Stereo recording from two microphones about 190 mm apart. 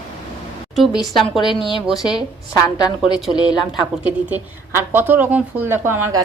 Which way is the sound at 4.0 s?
10° right (ahead or behind).